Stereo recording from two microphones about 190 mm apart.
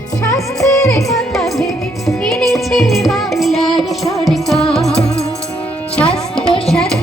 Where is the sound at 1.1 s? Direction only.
Centre (ahead or behind).